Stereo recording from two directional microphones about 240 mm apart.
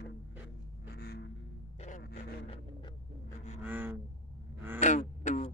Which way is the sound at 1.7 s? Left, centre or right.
Left.